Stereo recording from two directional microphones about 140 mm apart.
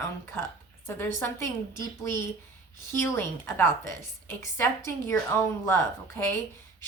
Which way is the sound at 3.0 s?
15° left (ahead or behind).